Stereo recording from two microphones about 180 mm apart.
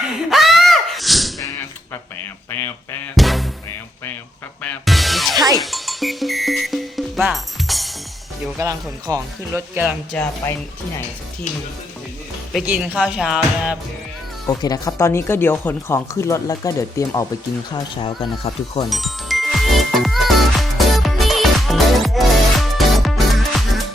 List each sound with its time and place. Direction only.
0.0 s a sound: centre (ahead or behind)
1.4 s whip: 15° left (ahead or behind)
3.2 s music: centre (ahead or behind)
4.6 s music: 5° left (ahead or behind)
8.5 s speech: 20° right (ahead or behind)
9.8 s speech: centre (ahead or behind)
12.6 s speech: 10° right (ahead or behind)
14.4 s speech: 20° left (ahead or behind)
18.0 s speech: 30° left (ahead or behind)
18.9 s music: centre (ahead or behind)